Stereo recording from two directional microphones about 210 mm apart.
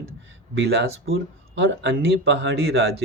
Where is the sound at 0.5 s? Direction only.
50° right (ahead or behind).